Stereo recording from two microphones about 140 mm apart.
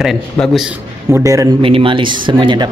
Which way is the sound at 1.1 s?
25° right (ahead or behind).